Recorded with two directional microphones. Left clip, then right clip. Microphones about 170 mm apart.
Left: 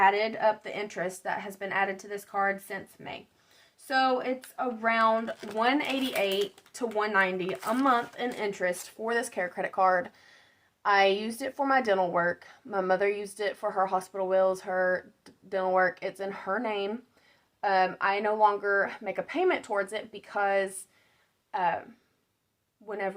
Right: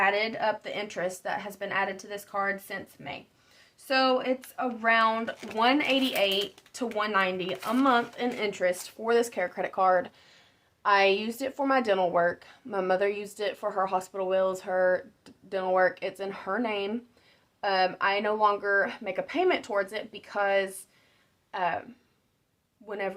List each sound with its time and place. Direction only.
0.0 s speech: 20° right (ahead or behind)
22.9 s speech: 20° right (ahead or behind)